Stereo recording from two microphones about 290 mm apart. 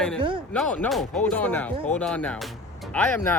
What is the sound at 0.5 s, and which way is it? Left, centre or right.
Speech, centre.